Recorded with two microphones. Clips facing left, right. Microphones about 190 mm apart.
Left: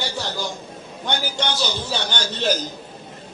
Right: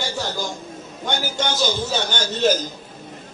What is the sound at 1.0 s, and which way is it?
Speech, 45° right (ahead or behind).